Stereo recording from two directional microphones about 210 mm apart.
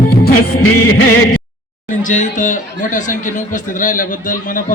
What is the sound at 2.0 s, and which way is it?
Speech, 35° left (ahead or behind).